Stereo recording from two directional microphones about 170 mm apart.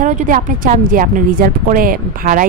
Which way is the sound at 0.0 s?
50° right (ahead or behind).